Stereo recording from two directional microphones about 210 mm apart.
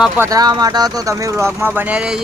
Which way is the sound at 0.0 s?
15° right (ahead or behind).